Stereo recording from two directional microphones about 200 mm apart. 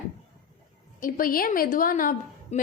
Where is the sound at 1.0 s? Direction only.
45° left (ahead or behind).